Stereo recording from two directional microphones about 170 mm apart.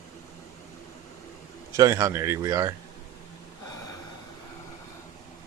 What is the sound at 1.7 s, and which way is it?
A man's voice, 20° right (ahead or behind).